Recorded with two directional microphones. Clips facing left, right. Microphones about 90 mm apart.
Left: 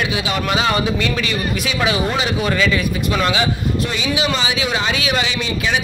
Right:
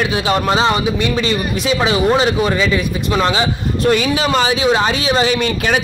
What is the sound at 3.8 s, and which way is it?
Speech, 50° right (ahead or behind).